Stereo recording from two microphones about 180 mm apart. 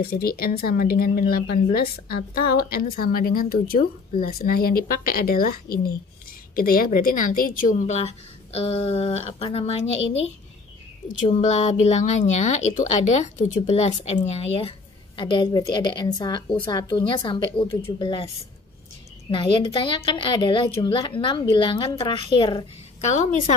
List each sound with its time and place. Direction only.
0.0 s a woman's voice: 60° left (ahead or behind); by 9.8 s 35° left (ahead or behind)
11.2 s a woman's voice: 40° left (ahead or behind)
19.3 s a woman's voice: 25° left (ahead or behind)
23.0 s speech: 40° left (ahead or behind)